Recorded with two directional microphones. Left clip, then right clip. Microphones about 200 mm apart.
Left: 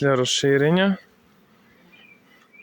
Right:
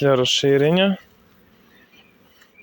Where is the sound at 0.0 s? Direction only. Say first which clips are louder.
Right 3 dB; 10° left (ahead or behind).